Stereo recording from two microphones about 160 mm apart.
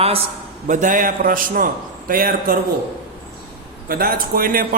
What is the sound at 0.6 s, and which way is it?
A man's voice, 50° right (ahead or behind).